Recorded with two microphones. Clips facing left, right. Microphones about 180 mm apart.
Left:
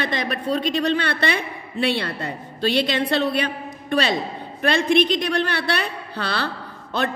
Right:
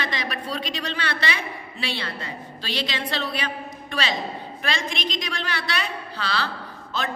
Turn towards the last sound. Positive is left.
turn(degrees=60)  # may be behind; listen again after turning